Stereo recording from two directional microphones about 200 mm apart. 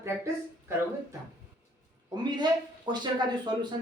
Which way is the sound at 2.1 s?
20° right (ahead or behind).